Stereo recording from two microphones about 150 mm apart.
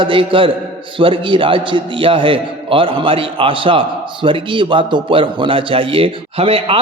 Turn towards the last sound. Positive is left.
turn(degrees=-40)  # may be behind; listen again after turning